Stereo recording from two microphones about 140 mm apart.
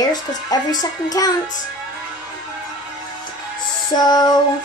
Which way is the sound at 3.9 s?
30° left (ahead or behind).